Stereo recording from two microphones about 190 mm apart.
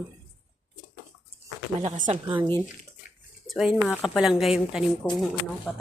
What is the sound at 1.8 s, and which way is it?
Speech, 40° right (ahead or behind).